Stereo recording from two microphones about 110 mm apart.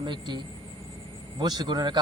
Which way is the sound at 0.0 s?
40° right (ahead or behind).